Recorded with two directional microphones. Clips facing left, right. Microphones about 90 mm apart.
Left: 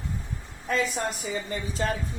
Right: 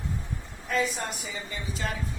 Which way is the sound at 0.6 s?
40° left (ahead or behind).